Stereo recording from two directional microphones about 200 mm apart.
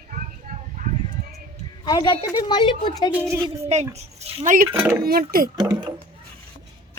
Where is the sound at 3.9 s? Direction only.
35° right (ahead or behind).